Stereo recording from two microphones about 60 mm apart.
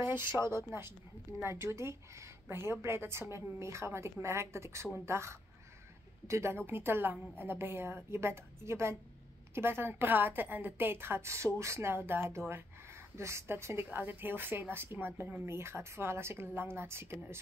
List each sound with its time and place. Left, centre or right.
0.0 s a woman's voice: right